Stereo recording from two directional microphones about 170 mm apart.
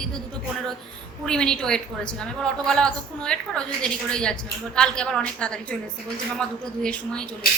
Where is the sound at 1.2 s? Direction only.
5° left (ahead or behind).